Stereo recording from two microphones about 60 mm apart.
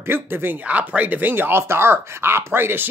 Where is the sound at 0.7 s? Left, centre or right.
Right.